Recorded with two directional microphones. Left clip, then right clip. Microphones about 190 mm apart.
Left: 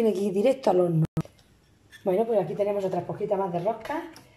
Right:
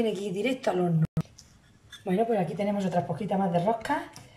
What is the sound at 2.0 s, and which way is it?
Speech, 25° left (ahead or behind).